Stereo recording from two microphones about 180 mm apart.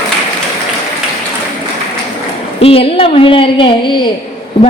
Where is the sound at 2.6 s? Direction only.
30° left (ahead or behind).